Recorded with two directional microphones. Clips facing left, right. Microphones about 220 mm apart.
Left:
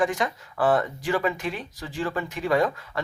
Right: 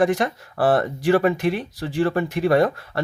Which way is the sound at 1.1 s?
65° right (ahead or behind).